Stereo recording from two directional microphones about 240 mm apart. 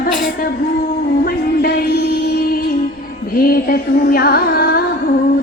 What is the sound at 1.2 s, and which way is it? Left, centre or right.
Music, left.